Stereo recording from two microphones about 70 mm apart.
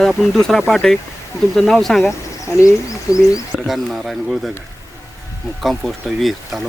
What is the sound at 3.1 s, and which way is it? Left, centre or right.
Speech, left.